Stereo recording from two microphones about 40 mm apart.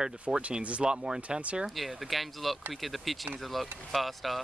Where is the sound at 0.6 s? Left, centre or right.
Right.